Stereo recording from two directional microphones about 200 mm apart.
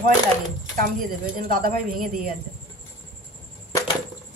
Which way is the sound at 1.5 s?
45° right (ahead or behind).